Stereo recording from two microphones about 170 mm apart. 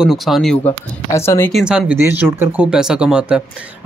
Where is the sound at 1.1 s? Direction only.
15° left (ahead or behind).